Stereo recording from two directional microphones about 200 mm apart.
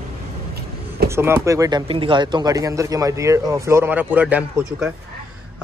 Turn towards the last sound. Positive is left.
turn(degrees=-5)  # may be behind; listen again after turning